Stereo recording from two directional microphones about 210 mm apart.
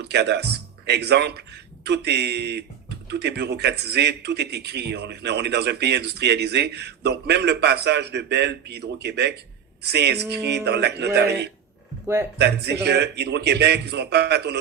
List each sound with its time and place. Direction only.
0.1 s a man's voice: 55° right (ahead or behind)